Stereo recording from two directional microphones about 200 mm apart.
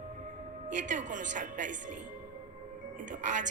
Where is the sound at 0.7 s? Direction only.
40° right (ahead or behind).